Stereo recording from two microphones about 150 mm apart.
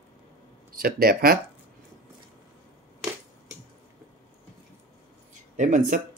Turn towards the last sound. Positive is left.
turn(degrees=-55)  # may be behind; listen again after turning